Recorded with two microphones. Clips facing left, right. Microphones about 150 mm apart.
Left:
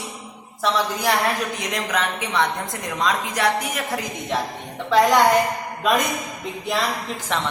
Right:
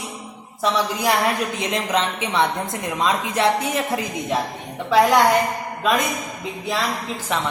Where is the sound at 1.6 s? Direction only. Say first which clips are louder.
Right 3 dB; 25° right (ahead or behind).